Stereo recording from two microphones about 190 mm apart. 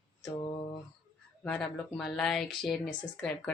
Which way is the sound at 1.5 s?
5° left (ahead or behind).